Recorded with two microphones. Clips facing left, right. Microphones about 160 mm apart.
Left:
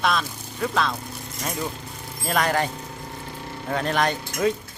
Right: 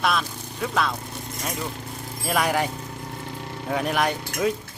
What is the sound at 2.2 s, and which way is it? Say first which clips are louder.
Speech: even; 5° right (ahead or behind).